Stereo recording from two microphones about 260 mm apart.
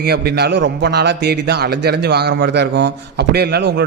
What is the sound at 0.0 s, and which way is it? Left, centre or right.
Speech, right.